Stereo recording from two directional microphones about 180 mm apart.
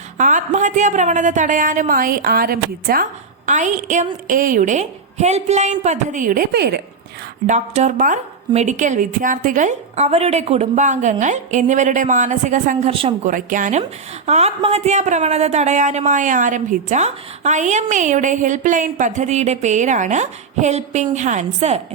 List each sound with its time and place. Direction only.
0.2 s a woman's voice: 45° right (ahead or behind); by 6.8 s 65° right (ahead or behind)
7.4 s a woman's voice: 40° right (ahead or behind)
12.9 s speech: 30° right (ahead or behind)
13.2 s a woman's voice: 45° right (ahead or behind)